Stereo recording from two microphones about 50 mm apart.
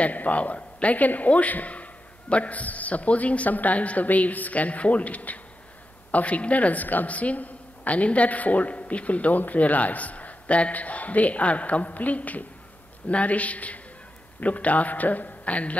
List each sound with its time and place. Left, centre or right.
0.0 s a woman's voice: left